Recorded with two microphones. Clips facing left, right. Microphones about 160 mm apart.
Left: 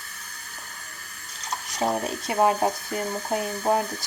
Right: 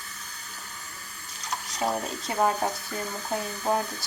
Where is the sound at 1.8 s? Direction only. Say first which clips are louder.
Left 3 dB; 25° left (ahead or behind).